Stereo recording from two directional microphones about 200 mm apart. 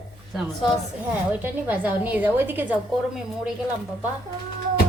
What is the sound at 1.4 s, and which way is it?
A woman's voice, 10° right (ahead or behind).